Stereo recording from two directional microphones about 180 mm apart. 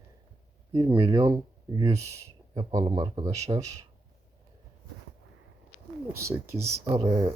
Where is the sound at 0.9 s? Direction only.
25° right (ahead or behind).